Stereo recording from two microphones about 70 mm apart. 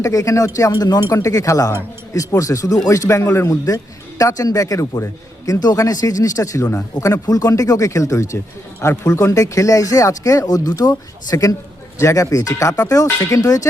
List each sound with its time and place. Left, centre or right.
0.0 s speech: left
0.7 s speech: left
1.2 s speech: left
5.5 s speech: left
11.9 s speech: left